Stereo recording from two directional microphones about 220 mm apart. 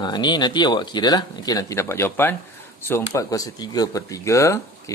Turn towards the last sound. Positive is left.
turn(degrees=15)  # may be behind; listen again after turning